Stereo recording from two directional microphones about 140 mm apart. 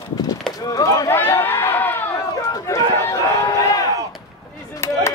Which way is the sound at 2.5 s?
25° left (ahead or behind).